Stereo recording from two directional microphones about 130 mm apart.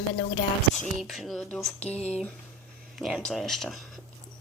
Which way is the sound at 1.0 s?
Centre (ahead or behind).